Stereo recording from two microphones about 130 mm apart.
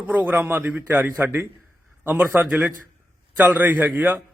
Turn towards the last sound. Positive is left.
turn(degrees=-15)  # may be behind; listen again after turning